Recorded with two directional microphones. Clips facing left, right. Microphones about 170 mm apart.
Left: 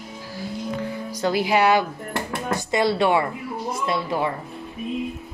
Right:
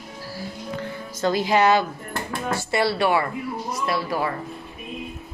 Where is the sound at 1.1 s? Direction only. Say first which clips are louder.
Even; 10° left (ahead or behind).